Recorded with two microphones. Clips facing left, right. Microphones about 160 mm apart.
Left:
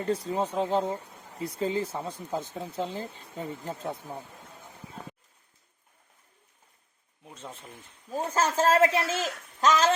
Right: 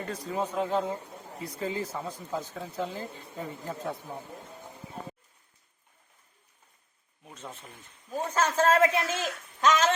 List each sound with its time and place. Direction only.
0.0 s speech: 30° left (ahead or behind)
8.1 s speech: 30° left (ahead or behind)